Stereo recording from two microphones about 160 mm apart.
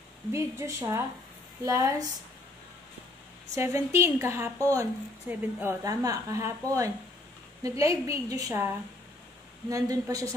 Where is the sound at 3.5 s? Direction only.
15° right (ahead or behind).